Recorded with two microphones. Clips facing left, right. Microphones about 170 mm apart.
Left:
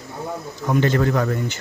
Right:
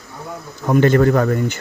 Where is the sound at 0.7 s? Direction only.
50° right (ahead or behind).